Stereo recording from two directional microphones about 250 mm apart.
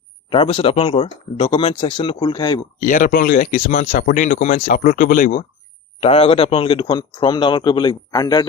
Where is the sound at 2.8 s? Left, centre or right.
Left.